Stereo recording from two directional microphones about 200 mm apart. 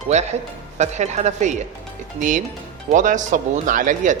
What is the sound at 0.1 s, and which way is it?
Speech, 35° right (ahead or behind).